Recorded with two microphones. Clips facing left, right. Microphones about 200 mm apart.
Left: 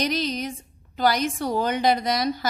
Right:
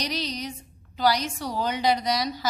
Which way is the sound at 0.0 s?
55° left (ahead or behind).